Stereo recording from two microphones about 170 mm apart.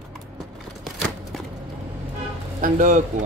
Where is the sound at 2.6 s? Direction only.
50° right (ahead or behind).